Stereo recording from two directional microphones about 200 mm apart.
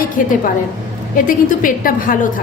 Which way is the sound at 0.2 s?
40° left (ahead or behind).